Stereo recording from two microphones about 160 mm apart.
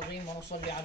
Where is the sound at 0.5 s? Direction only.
45° left (ahead or behind).